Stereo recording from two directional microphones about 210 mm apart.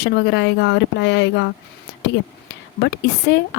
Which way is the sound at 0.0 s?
55° left (ahead or behind).